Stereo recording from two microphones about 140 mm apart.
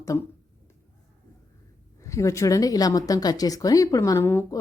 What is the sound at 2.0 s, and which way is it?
Speech, 20° left (ahead or behind).